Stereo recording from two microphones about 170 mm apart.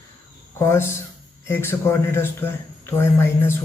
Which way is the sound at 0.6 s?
15° left (ahead or behind).